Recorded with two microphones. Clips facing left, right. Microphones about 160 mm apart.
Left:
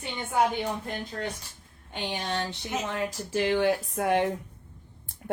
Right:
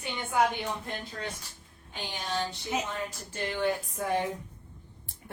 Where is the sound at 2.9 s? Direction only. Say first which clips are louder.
Left 7 dB; 85° left; by 4.3 s 70° left (ahead or behind).